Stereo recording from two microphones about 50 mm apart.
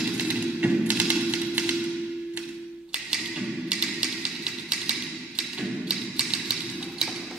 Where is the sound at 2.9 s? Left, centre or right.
Centre.